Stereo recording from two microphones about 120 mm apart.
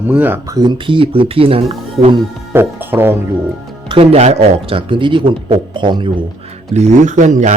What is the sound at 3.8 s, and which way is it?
Speech, 55° right (ahead or behind).